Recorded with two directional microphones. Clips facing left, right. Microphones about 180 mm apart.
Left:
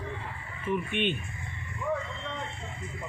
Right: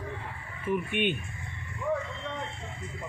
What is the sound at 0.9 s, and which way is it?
Speech, 50° right (ahead or behind).